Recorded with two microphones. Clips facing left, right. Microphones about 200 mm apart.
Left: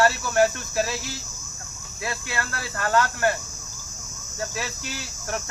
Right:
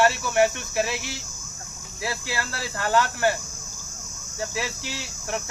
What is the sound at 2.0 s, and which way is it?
Speech, 25° right (ahead or behind).